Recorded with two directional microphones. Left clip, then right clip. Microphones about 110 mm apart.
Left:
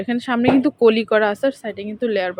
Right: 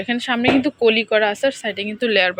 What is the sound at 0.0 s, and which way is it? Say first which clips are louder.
Speech: even; 35° left (ahead or behind).